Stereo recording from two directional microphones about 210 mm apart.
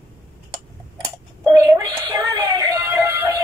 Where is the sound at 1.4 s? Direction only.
20° right (ahead or behind).